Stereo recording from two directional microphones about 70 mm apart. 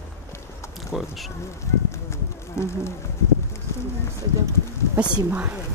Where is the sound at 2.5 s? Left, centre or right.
Left.